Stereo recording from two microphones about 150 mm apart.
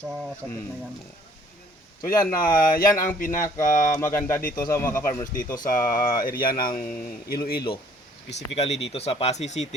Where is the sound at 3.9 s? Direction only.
15° left (ahead or behind).